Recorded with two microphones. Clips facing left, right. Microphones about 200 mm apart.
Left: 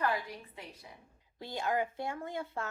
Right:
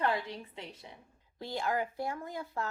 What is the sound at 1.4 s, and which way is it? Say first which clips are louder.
Speech: even; 20° left (ahead or behind).